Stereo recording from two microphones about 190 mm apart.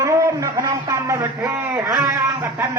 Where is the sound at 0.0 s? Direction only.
15° right (ahead or behind).